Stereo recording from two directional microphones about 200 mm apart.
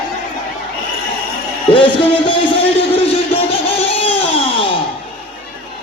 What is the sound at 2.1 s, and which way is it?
Music, 25° left (ahead or behind).